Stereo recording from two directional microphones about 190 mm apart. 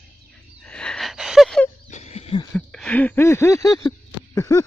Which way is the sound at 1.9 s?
35° left (ahead or behind).